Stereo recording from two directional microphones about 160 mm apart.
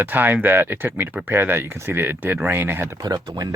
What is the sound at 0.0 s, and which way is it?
Speech, 10° right (ahead or behind).